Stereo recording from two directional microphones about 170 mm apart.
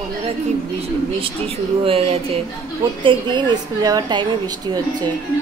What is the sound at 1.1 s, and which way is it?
A woman's voice, 30° right (ahead or behind).